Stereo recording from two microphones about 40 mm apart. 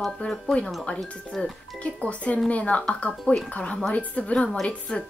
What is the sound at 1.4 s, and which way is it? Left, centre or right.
Speech, left.